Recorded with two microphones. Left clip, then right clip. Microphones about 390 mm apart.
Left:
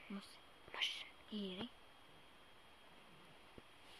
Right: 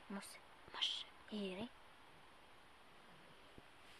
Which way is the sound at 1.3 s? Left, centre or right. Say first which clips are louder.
Right 2 dB; right.